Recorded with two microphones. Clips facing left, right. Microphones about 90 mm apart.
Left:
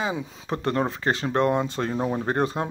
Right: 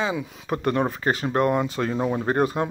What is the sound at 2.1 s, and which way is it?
Speech, 40° right (ahead or behind).